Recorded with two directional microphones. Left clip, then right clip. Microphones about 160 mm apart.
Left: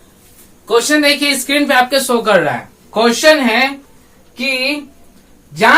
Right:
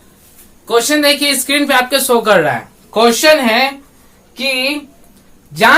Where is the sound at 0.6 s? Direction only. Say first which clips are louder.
Even; 15° right (ahead or behind); by 2.1 s 30° right (ahead or behind).